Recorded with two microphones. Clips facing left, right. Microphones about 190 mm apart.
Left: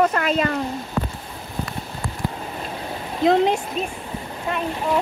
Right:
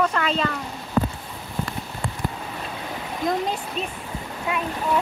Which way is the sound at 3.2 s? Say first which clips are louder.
Left 8 dB; 75° left (ahead or behind).